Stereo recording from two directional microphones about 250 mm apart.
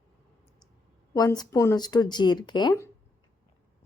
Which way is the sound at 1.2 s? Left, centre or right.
Centre.